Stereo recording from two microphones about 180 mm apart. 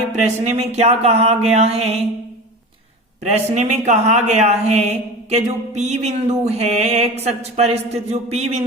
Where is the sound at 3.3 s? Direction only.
40° right (ahead or behind).